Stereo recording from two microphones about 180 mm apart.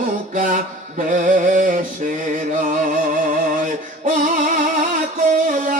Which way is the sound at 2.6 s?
45° right (ahead or behind).